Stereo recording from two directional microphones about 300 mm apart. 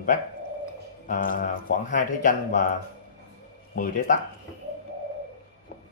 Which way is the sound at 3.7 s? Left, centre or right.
Left.